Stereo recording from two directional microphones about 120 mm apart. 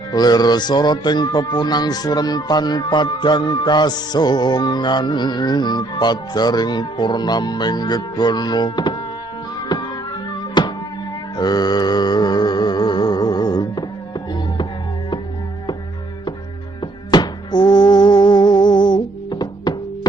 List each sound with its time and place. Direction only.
0.1 s speech: 35° left (ahead or behind)
10.6 s music: 40° left (ahead or behind)
16.8 s music: 40° left (ahead or behind)